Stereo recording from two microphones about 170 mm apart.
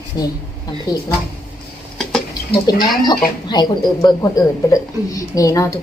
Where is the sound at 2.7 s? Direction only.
25° left (ahead or behind).